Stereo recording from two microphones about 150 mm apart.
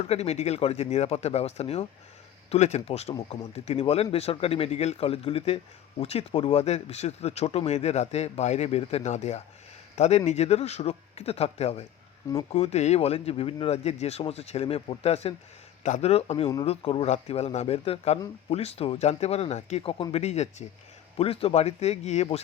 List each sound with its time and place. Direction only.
0.0 s speech: 45° left (ahead or behind)